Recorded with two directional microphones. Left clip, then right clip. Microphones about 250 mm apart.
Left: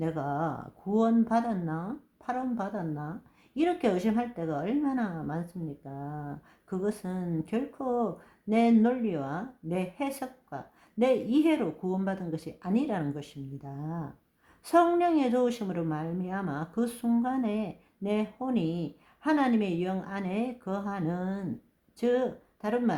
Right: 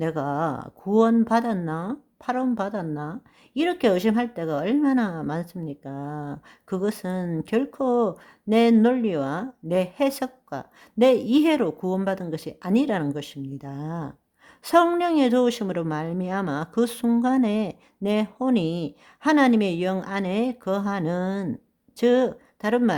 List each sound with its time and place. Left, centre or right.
0.0 s speech: right